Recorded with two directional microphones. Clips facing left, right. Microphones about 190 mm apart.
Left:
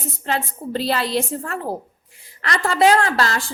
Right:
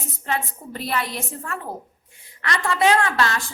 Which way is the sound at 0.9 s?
30° left (ahead or behind).